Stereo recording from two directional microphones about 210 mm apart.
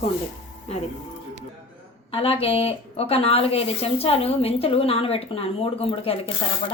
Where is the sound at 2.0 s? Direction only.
25° left (ahead or behind).